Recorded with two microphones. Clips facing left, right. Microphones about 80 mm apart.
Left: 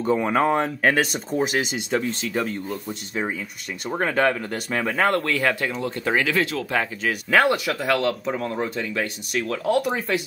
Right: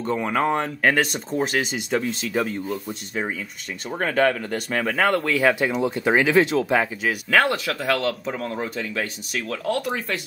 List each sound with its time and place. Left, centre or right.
0.0 s speech: centre
5.6 s speech: centre
7.2 s speech: centre